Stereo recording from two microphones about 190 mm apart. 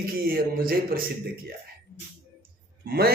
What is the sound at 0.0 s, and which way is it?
A man's voice, 50° right (ahead or behind).